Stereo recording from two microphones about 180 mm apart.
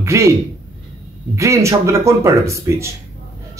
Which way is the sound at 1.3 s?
15° right (ahead or behind).